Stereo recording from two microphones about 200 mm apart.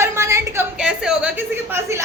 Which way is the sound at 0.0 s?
15° right (ahead or behind).